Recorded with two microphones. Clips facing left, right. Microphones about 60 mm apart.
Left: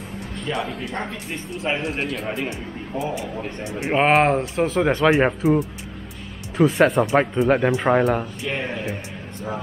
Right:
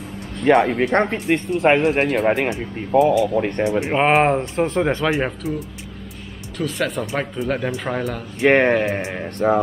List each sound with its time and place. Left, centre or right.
0.4 s speech: right
3.8 s speech: centre
6.6 s speech: centre
8.4 s speech: right